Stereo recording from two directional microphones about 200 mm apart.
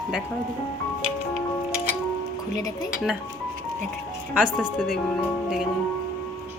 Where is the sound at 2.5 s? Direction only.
20° left (ahead or behind).